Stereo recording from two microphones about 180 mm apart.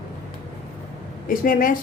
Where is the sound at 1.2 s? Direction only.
50° left (ahead or behind).